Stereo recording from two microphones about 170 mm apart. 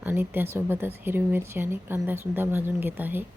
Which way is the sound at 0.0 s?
10° right (ahead or behind).